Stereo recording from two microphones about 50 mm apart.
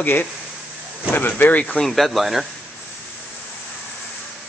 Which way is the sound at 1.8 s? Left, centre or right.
Centre.